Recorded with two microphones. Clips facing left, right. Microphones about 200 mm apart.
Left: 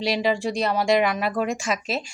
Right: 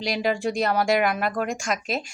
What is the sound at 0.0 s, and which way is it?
Speech, centre (ahead or behind).